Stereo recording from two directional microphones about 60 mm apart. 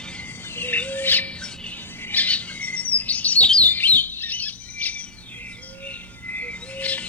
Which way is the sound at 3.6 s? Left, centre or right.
Left.